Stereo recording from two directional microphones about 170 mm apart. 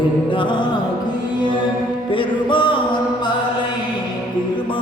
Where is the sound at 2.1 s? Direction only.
30° left (ahead or behind).